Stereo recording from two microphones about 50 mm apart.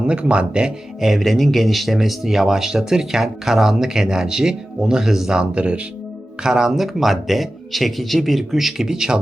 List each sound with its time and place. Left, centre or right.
0.1 s speech: right
1.0 s speech: centre